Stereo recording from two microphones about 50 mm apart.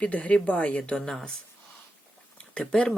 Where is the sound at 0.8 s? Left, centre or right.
Centre.